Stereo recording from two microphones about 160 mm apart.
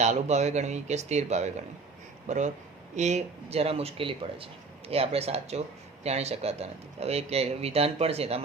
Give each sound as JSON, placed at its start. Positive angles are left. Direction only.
{"t": 0.0, "sound": "a man's voice", "side_deg": -45}